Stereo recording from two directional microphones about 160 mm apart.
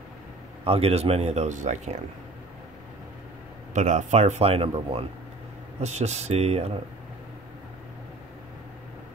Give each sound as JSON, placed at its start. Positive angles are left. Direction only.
{"t": 0.7, "sound": "speech", "side_deg": -40}
{"t": 3.7, "sound": "speech", "side_deg": -45}